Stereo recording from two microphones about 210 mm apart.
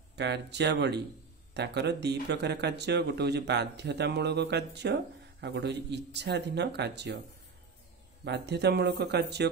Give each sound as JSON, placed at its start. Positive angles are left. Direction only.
{"t": 0.1, "sound": "speech", "side_deg": -55}
{"t": 8.2, "sound": "speech", "side_deg": -55}